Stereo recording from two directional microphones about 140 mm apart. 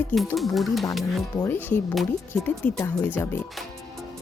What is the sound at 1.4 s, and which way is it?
Speech, 15° left (ahead or behind).